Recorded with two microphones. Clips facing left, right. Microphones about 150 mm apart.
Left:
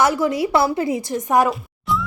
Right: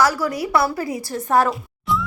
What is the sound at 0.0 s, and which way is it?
A woman's voice, 20° left (ahead or behind).